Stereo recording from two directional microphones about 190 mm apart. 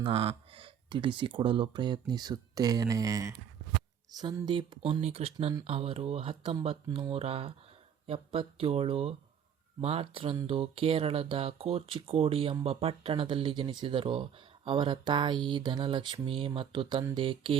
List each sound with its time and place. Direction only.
0.0 s speech: 30° right (ahead or behind)